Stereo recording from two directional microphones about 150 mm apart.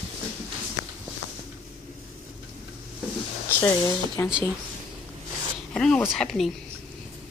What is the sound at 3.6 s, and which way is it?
Speech, 20° left (ahead or behind).